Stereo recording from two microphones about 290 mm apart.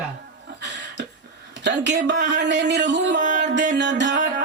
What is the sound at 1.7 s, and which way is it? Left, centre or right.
Music, right.